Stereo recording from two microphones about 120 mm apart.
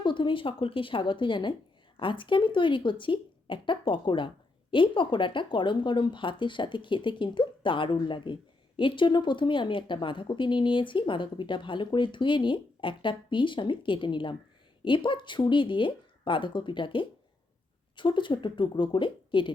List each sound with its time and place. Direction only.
0.0 s speech: 40° left (ahead or behind)